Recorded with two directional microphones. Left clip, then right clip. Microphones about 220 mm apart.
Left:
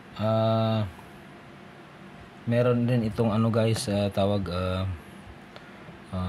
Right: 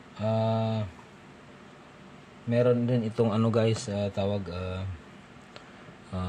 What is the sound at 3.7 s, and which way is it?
Speech, 15° left (ahead or behind).